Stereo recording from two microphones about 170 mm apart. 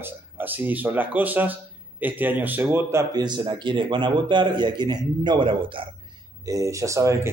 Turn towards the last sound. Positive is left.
turn(degrees=-20)  # may be behind; listen again after turning